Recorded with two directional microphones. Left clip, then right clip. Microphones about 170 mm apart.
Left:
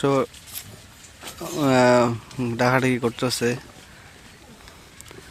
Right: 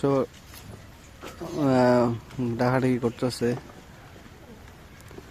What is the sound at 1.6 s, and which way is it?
Speech, 10° left (ahead or behind).